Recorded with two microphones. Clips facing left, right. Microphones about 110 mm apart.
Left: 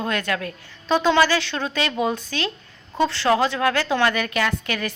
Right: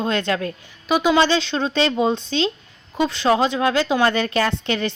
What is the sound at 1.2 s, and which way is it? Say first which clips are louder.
A woman's voice: right 2 dB; 25° right (ahead or behind).